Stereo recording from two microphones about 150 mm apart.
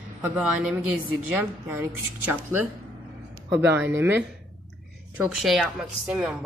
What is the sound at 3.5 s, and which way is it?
Speech, 15° right (ahead or behind).